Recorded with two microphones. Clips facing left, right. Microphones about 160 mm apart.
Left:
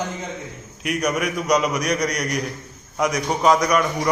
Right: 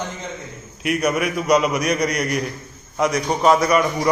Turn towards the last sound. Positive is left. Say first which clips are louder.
# right 2 dB
turn(degrees=-5)  # may be behind; listen again after turning